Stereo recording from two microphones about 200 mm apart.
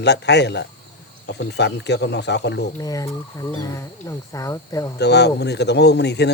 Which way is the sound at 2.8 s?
15° left (ahead or behind).